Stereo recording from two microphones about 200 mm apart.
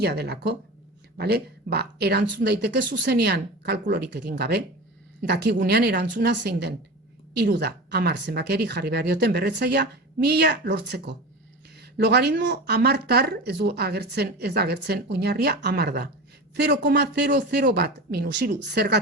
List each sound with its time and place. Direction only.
0.0 s speech: 55° right (ahead or behind)